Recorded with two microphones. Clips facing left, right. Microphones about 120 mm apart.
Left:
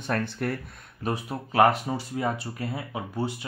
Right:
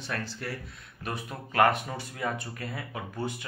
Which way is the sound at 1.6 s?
20° left (ahead or behind).